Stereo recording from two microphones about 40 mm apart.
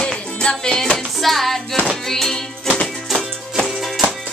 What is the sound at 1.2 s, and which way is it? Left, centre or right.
Music, centre.